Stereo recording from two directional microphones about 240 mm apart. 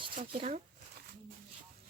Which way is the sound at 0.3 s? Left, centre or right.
Right.